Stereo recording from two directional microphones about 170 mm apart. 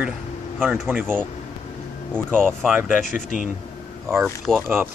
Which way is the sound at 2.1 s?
5° left (ahead or behind).